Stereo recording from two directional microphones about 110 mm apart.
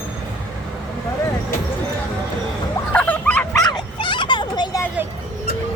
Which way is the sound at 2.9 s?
15° left (ahead or behind).